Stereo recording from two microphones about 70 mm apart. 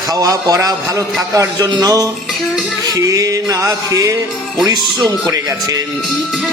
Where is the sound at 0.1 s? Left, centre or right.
Right.